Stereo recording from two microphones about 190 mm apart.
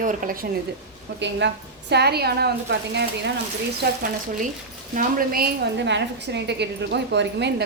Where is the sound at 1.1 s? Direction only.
70° right (ahead or behind).